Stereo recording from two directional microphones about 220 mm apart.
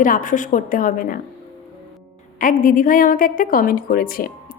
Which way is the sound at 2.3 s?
40° left (ahead or behind).